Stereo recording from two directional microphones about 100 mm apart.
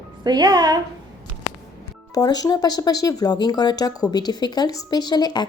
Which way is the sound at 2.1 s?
40° left (ahead or behind).